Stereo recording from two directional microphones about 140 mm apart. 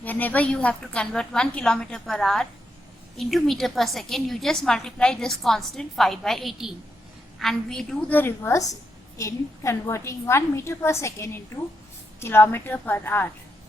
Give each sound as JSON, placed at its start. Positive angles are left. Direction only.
{"t": 0.0, "sound": "a woman's voice", "side_deg": 10}